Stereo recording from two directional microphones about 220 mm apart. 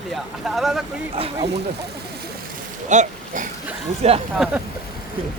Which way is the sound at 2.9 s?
35° right (ahead or behind).